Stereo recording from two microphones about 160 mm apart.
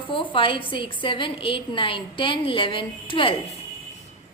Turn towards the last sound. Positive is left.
turn(degrees=30)  # may be behind; listen again after turning